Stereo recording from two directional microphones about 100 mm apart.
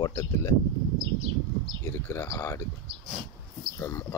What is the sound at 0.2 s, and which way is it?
Speech, 30° left (ahead or behind).